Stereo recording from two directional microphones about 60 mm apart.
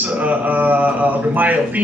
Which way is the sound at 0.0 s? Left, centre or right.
Right.